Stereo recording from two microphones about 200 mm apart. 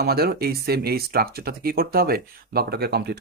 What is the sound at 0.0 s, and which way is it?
Speech, 50° right (ahead or behind).